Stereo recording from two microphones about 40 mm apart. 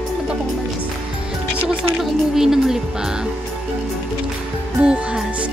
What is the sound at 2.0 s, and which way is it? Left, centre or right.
Music, centre.